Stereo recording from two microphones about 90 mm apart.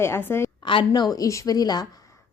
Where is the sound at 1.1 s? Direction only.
35° left (ahead or behind).